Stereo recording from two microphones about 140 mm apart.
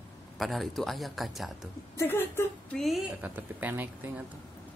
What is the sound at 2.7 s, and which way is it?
A woman's voice, centre (ahead or behind).